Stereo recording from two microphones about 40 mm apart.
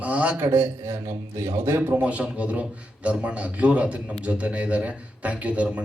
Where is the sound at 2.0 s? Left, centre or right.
Right.